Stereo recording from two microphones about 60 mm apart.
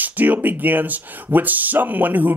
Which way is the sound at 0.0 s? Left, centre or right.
Right.